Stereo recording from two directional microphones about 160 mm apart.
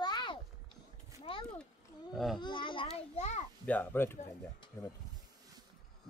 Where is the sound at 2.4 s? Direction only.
30° left (ahead or behind).